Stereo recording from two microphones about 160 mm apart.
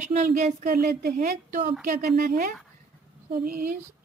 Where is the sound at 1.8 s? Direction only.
60° right (ahead or behind).